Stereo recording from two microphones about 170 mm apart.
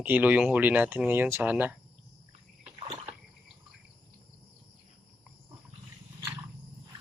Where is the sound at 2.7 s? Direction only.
30° right (ahead or behind).